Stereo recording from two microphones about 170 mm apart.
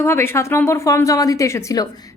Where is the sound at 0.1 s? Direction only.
15° left (ahead or behind).